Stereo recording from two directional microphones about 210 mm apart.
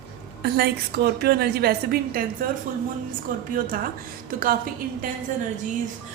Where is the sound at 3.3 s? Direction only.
40° right (ahead or behind).